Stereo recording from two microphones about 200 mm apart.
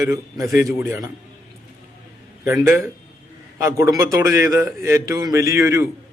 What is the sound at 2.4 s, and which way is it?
Speech, 15° right (ahead or behind).